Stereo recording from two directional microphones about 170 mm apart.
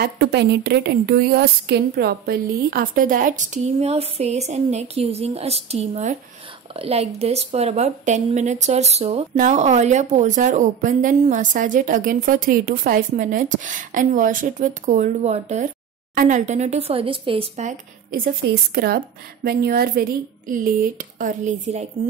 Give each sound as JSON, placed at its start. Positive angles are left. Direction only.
{"t": 0.0, "sound": "speech", "side_deg": -80}
{"t": 17.6, "sound": "a woman's voice", "side_deg": -55}